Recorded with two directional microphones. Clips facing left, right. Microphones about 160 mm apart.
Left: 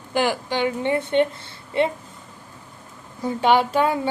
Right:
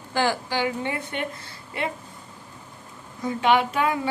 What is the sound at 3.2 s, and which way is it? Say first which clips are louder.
Speech: left 2 dB; 35° left (ahead or behind).